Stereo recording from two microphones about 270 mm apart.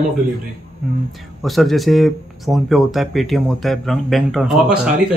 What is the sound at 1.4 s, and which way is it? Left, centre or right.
Speech, centre.